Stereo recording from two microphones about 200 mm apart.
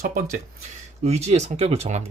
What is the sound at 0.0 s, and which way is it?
Speech, 45° right (ahead or behind).